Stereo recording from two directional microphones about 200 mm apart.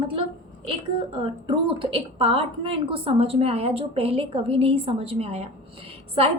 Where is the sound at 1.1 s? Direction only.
25° right (ahead or behind).